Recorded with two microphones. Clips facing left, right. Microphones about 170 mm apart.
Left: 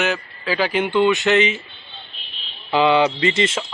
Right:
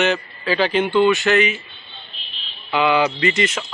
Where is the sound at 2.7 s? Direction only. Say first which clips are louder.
Left 2 dB; 30° left (ahead or behind).